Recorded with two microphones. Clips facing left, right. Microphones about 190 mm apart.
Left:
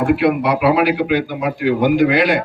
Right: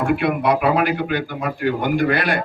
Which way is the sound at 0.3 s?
65° left (ahead or behind).